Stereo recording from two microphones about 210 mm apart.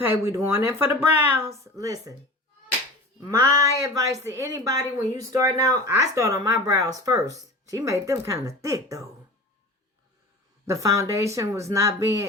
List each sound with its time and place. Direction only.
0.0 s speech: 10° right (ahead or behind)
3.2 s speech: 15° right (ahead or behind)
10.7 s speech: 15° right (ahead or behind)